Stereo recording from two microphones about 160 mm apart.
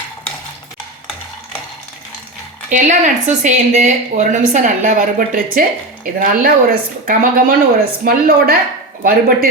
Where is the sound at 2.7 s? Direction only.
50° right (ahead or behind).